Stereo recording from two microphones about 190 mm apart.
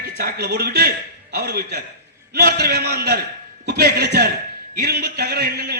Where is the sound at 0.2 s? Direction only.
55° right (ahead or behind).